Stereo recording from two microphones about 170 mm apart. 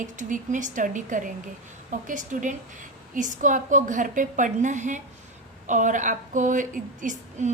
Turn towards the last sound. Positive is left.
turn(degrees=-45)  # may be behind; listen again after turning